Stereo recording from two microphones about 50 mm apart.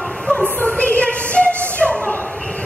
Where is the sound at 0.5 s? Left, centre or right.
Left.